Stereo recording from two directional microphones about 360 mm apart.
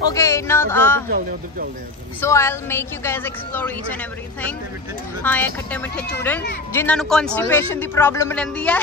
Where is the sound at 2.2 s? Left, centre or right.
Centre.